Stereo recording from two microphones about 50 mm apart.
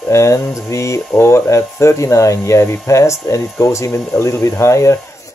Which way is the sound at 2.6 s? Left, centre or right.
Left.